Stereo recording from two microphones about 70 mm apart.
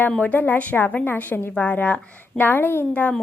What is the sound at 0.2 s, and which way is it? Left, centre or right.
A woman's voice, left.